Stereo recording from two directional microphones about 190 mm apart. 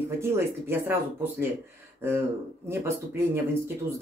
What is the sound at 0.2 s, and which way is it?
Speech, 10° right (ahead or behind).